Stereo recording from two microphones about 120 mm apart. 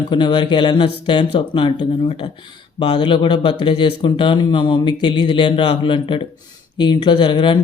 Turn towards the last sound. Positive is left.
turn(degrees=45)  # may be behind; listen again after turning